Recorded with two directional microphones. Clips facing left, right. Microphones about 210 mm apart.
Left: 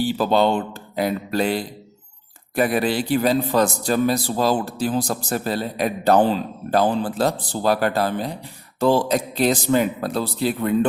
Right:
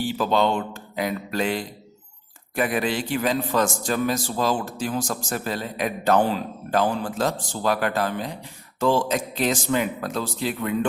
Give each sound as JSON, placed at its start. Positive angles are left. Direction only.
{"t": 0.2, "sound": "a man's voice", "side_deg": 35}